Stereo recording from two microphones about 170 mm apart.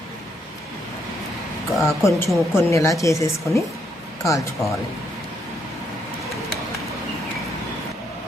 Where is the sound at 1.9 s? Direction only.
15° left (ahead or behind).